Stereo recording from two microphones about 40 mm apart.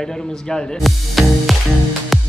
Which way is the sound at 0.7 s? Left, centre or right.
Centre.